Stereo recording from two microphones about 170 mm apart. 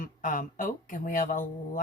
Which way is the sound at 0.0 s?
50° left (ahead or behind).